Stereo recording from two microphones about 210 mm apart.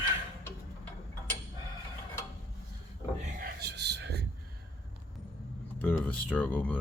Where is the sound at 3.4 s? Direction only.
50° right (ahead or behind).